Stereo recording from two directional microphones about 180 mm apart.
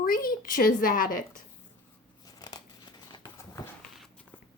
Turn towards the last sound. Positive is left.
turn(degrees=25)  # may be behind; listen again after turning